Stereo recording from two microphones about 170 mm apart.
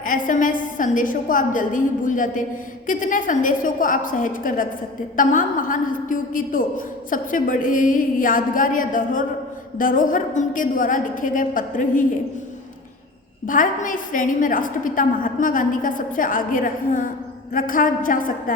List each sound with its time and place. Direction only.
0.0 s a woman's voice: 50° left (ahead or behind)
13.5 s a woman's voice: 50° left (ahead or behind)